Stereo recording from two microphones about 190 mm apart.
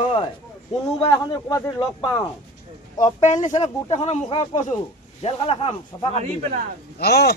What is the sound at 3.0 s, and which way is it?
Speech, 40° left (ahead or behind).